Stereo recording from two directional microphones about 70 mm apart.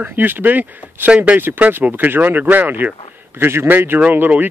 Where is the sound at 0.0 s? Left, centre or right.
Right.